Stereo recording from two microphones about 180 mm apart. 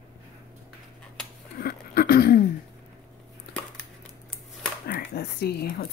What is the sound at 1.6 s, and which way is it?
Speech, 55° left (ahead or behind).